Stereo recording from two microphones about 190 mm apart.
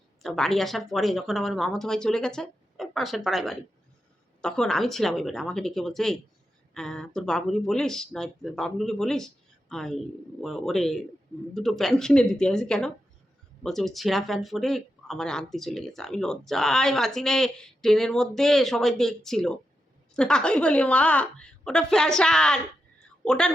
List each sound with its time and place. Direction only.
0.2 s speech: centre (ahead or behind)